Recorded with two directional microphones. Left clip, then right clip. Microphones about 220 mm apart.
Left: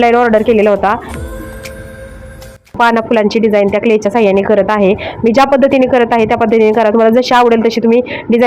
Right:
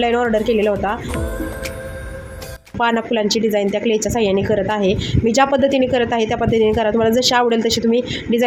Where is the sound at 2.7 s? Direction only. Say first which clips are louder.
Left 8 dB; 15° left (ahead or behind).